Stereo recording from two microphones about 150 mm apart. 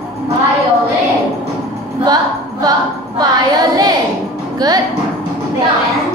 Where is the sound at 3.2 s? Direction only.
25° right (ahead or behind).